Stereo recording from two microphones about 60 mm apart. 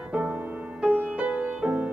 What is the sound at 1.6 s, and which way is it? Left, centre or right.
Music, centre.